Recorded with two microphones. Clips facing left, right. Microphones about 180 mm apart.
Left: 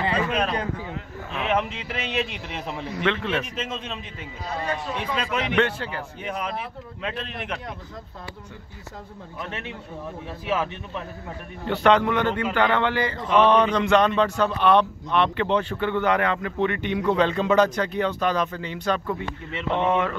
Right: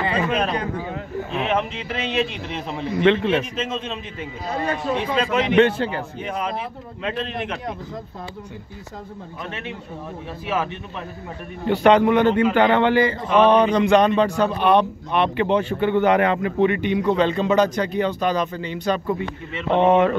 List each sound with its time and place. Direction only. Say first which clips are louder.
0.9 s speech: right 6 dB; 35° right (ahead or behind)
1.5 s speech: left 2 dB; 10° left (ahead or behind)
2.7 s speech: right 8 dB; 20° right (ahead or behind)
4.6 s a man's voice: right 5 dB; 45° right (ahead or behind)
5.0 s speech: right 5 dB; 25° right (ahead or behind)
11.6 s a man's voice: right 4 dB; 15° right (ahead or behind)
19.7 s speech: right 7 dB; 25° right (ahead or behind)